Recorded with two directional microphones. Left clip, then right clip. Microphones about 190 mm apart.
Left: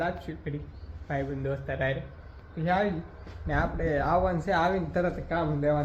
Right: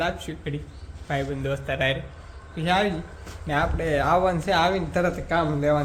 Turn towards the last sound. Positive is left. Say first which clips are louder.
# right 5 dB
turn(degrees=-20)  # may be behind; listen again after turning